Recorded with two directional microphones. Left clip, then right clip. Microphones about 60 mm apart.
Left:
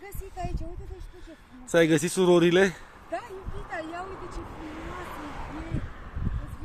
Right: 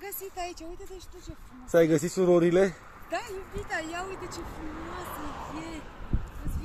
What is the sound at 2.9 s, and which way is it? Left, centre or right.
Speech, centre.